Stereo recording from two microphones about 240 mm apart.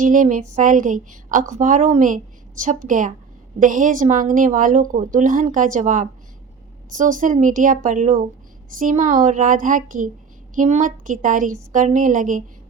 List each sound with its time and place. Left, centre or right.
0.0 s a woman's voice: right